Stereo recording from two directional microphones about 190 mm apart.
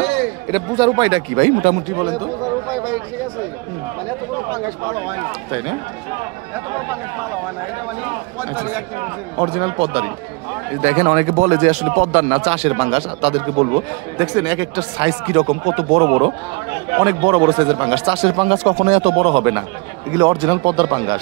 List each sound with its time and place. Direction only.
0.5 s speech: 25° right (ahead or behind)
1.4 s speech: 40° right (ahead or behind)
9.4 s speech: 25° right (ahead or behind)